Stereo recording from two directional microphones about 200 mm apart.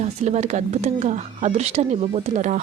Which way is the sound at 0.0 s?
35° right (ahead or behind).